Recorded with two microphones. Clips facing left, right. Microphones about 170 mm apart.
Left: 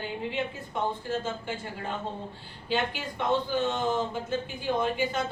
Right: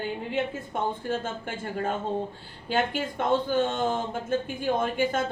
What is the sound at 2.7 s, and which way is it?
A woman's voice, 50° right (ahead or behind).